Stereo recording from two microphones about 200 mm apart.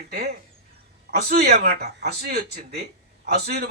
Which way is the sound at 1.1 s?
55° right (ahead or behind).